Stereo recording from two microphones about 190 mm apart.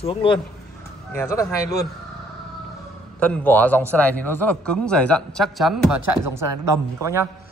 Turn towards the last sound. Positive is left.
turn(degrees=-15)  # may be behind; listen again after turning